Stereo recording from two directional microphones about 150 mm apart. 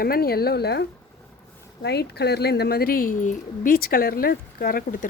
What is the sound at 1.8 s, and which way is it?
Speech, 90° left.